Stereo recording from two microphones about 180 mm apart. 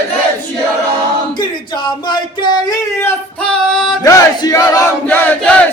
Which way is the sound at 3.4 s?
5° left (ahead or behind).